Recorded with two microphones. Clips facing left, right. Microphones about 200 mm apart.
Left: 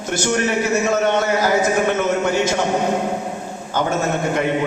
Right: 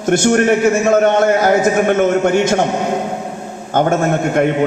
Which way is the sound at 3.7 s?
55° right (ahead or behind).